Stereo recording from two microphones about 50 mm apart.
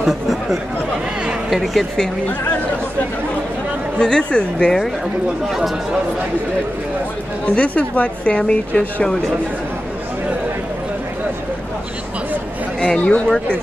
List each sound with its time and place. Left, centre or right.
0.0 s speech: centre
4.0 s a woman's voice: centre
7.4 s a woman's voice: left
8.4 s a woman's voice: centre
12.8 s a woman's voice: centre